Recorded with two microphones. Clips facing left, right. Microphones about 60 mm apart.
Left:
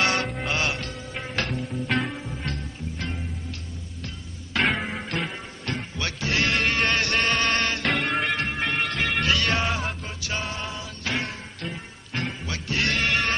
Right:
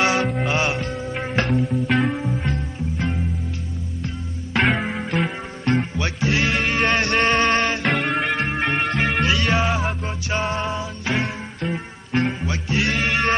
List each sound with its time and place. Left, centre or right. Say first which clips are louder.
0.0 s music: right 5 dB; centre
0.6 s music: right 5 dB; right
1.5 s music: right 7 dB; centre
2.1 s music: right 8 dB; right
4.6 s music: right 4 dB; centre
5.9 s music: right 5 dB; right
6.2 s music: right 2 dB; centre
6.9 s music: right 5 dB; right
7.6 s music: right 4 dB; centre
8.4 s music: right 4 dB; right
9.2 s music: right 3 dB; centre
9.5 s music: right 5 dB; centre
10.0 s music: right 7 dB; right; by 13.2 s centre